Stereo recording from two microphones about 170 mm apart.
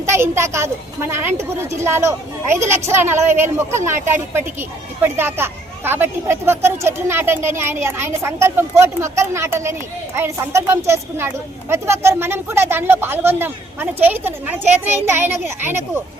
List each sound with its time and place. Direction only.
0.0 s speech: 15° right (ahead or behind)